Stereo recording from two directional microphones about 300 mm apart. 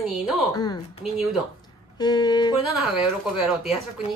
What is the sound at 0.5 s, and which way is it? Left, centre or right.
Music, centre.